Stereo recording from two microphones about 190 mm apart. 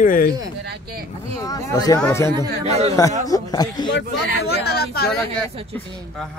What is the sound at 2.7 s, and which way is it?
Speech, 35° right (ahead or behind).